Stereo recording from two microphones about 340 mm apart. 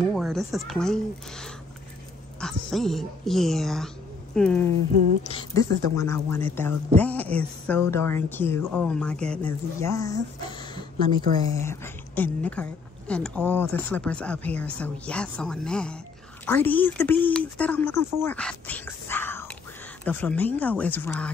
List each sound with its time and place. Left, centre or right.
0.0 s a woman's voice: centre
11.2 s a woman's voice: centre
11.6 s a woman's voice: centre
18.2 s a sound: centre
20.1 s a woman's voice: centre